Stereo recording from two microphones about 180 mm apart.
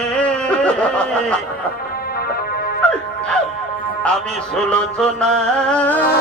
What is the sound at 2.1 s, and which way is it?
Music, 55° left (ahead or behind).